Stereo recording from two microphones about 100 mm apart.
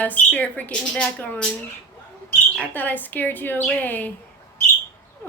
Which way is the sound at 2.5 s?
15° left (ahead or behind).